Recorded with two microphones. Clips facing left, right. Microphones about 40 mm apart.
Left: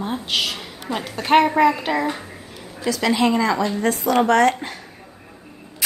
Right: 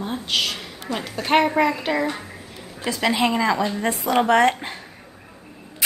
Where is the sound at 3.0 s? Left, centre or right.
Centre.